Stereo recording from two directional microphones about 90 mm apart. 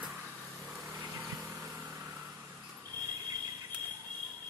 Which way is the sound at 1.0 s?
30° right (ahead or behind).